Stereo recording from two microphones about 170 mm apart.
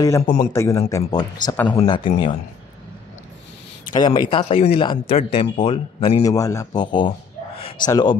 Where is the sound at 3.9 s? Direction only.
25° left (ahead or behind).